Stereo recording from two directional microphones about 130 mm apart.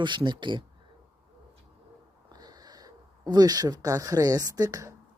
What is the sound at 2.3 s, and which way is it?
Speech, 30° right (ahead or behind).